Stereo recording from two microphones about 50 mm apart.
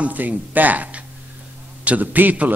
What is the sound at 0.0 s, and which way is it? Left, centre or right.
A man's voice, right.